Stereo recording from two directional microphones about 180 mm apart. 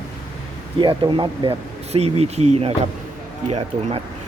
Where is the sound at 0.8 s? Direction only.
25° right (ahead or behind).